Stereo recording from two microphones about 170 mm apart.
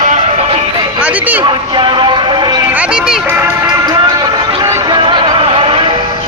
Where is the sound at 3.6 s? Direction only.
25° right (ahead or behind).